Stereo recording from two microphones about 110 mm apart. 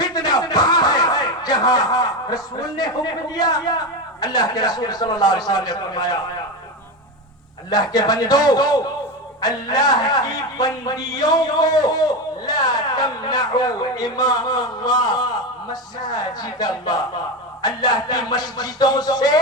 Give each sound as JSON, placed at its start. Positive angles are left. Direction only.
{"t": 0.0, "sound": "speech", "side_deg": 35}
{"t": 7.7, "sound": "speech", "side_deg": 35}